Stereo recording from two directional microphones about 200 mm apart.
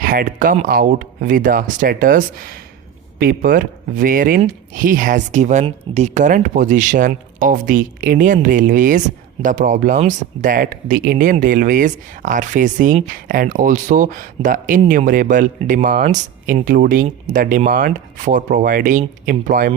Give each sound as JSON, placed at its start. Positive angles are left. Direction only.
{"t": 0.0, "sound": "speech", "side_deg": -45}